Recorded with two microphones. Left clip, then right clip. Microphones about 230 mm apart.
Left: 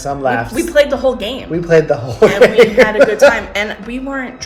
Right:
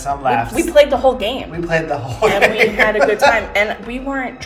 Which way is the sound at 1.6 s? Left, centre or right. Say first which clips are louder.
Left 7 dB; left.